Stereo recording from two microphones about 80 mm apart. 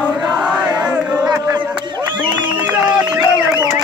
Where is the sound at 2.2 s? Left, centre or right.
Right.